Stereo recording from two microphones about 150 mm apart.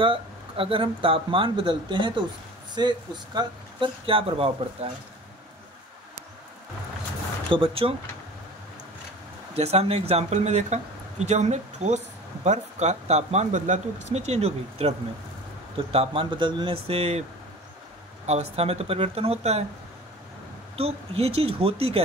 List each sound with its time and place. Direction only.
0.0 s speech: 35° right (ahead or behind)
7.4 s speech: 35° right (ahead or behind)
9.5 s speech: 45° right (ahead or behind)
18.2 s speech: 45° right (ahead or behind)
20.7 s speech: 40° right (ahead or behind)